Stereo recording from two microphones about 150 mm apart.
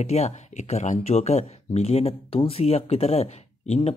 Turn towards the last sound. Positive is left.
turn(degrees=45)  # may be behind; listen again after turning